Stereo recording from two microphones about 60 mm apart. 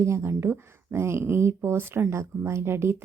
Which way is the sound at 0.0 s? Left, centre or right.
Right.